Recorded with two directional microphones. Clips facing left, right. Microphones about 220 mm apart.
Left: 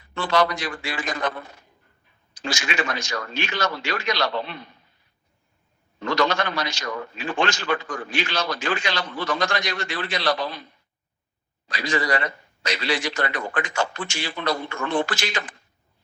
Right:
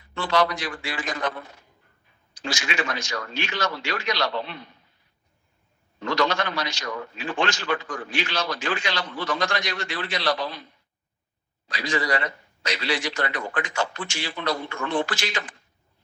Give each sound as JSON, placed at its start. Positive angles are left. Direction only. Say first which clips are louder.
{"t": 0.1, "sound": "a man's voice", "louder": "left 1 dB", "side_deg": 50}
{"t": 6.0, "sound": "a man's voice", "louder": "left 2 dB", "side_deg": 50}
{"t": 11.7, "sound": "a man's voice", "louder": "left 2 dB", "side_deg": 50}